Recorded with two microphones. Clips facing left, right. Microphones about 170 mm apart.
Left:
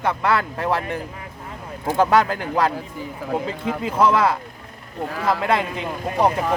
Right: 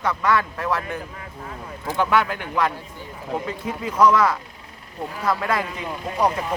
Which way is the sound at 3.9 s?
30° left (ahead or behind).